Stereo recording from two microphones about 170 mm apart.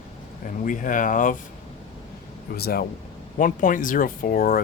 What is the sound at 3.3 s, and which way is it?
Speech, 50° left (ahead or behind).